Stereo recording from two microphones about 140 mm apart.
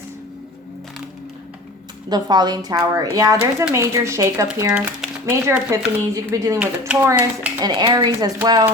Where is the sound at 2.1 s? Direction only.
30° right (ahead or behind).